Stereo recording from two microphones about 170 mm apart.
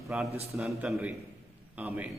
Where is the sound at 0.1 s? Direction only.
10° right (ahead or behind).